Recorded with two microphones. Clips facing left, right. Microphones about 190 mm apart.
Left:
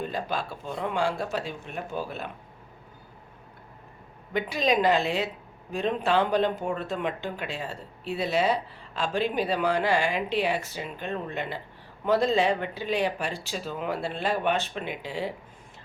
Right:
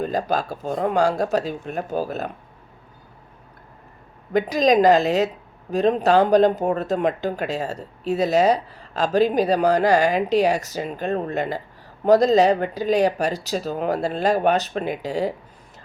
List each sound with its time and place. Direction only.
0.0 s speech: 40° right (ahead or behind)
4.3 s speech: 40° right (ahead or behind)